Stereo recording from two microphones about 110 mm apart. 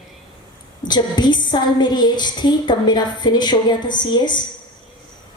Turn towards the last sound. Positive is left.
turn(degrees=40)  # may be behind; listen again after turning